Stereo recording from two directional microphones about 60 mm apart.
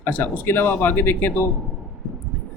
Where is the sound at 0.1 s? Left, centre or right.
Left.